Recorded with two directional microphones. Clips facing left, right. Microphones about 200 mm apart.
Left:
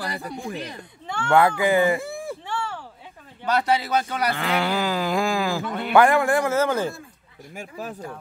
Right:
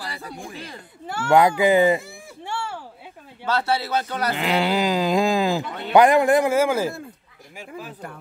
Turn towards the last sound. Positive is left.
turn(degrees=-5)  # may be behind; listen again after turning